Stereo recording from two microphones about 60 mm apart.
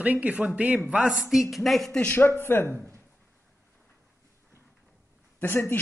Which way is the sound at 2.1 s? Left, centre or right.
Left.